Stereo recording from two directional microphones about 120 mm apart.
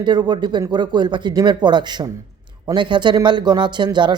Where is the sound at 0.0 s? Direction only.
40° right (ahead or behind).